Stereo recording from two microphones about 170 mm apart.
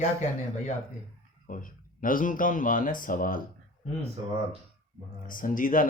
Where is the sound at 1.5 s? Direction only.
50° left (ahead or behind).